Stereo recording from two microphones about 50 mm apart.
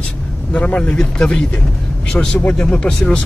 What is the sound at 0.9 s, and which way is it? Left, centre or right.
Speech, centre.